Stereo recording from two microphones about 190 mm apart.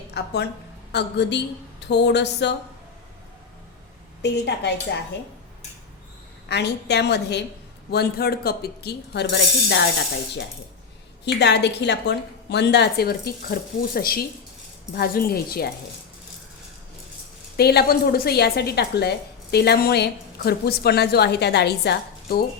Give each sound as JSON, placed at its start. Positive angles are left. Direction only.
{"t": 0.1, "sound": "a woman's voice", "side_deg": 60}
{"t": 4.2, "sound": "a woman's voice", "side_deg": 60}
{"t": 6.5, "sound": "a woman's voice", "side_deg": 60}
{"t": 11.3, "sound": "a woman's voice", "side_deg": 60}
{"t": 17.6, "sound": "a woman's voice", "side_deg": 55}